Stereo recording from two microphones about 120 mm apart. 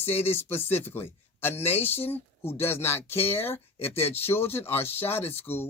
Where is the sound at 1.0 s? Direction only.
20° left (ahead or behind).